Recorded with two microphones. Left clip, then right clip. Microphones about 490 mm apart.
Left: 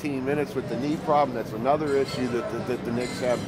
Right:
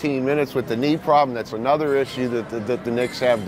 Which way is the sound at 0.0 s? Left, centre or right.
Right.